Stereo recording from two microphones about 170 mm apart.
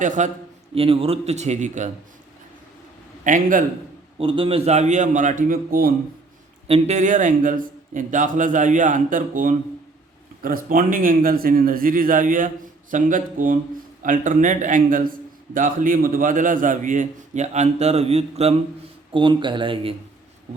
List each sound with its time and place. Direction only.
0.0 s a man's voice: 50° right (ahead or behind)
0.7 s speech: 35° right (ahead or behind)
3.2 s a man's voice: 50° right (ahead or behind)
4.2 s a man's voice: 30° right (ahead or behind); by 5.9 s 55° right (ahead or behind)
6.7 s a man's voice: 35° right (ahead or behind)